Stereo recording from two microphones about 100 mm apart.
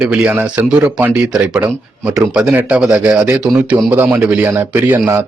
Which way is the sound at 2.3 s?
15° right (ahead or behind).